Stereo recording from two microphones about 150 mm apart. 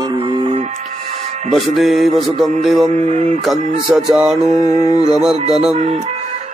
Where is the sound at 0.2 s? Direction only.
35° right (ahead or behind).